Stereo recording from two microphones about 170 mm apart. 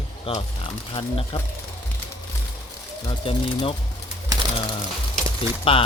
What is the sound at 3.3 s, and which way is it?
Speech, 30° left (ahead or behind).